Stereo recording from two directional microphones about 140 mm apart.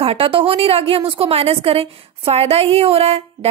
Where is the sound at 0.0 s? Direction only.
40° right (ahead or behind).